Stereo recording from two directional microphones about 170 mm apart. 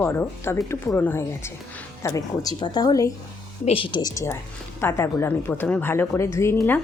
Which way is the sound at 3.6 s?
30° left (ahead or behind).